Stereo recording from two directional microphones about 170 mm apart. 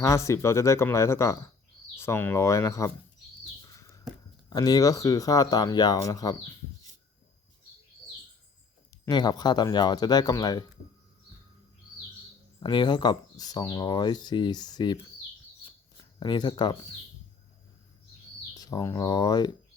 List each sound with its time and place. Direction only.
0.0 s speech: 20° left (ahead or behind)
3.6 s a sound: 20° left (ahead or behind)
4.4 s speech: 20° left (ahead or behind)
9.0 s speech: 25° left (ahead or behind)
12.5 s speech: 25° left (ahead or behind)
16.0 s speech: 25° left (ahead or behind)
18.5 s speech: 20° left (ahead or behind)